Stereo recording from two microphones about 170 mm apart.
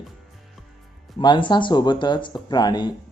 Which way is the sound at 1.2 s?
25° left (ahead or behind).